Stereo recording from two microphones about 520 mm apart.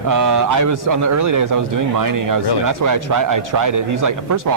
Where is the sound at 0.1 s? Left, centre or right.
Right.